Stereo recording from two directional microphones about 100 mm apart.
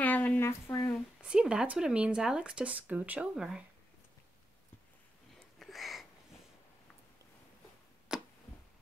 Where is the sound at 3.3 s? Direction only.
5° right (ahead or behind).